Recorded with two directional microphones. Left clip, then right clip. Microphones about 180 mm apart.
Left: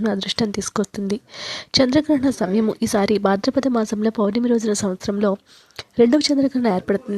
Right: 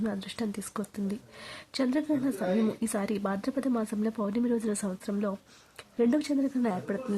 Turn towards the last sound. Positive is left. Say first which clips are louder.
# left 11 dB
turn(degrees=40)  # may be behind; listen again after turning